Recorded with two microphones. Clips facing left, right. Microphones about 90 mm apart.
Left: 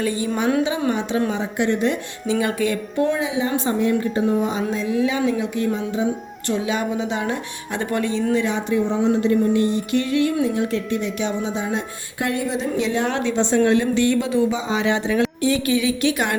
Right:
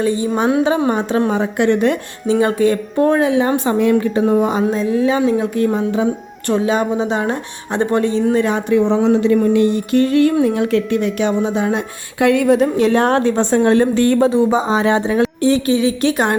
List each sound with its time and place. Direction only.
0.0 s a woman's voice: 25° right (ahead or behind)
0.8 s speech: 45° right (ahead or behind)
1.3 s a woman's voice: 55° right (ahead or behind)
2.2 s speech: 35° right (ahead or behind); by 6.1 s 55° right (ahead or behind)
6.5 s speech: 40° right (ahead or behind)
8.3 s speech: 45° right (ahead or behind)
8.8 s speech: 70° right (ahead or behind)
9.7 s speech: 45° right (ahead or behind)
10.4 s a woman's voice: 70° right (ahead or behind)
12.2 s speech: 75° right (ahead or behind); by 16.3 s 35° right (ahead or behind)